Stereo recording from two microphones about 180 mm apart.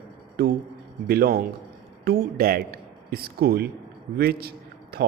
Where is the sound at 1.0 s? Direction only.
55° right (ahead or behind).